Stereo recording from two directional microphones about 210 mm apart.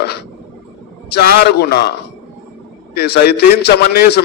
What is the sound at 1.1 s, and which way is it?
A man's voice, 50° left (ahead or behind).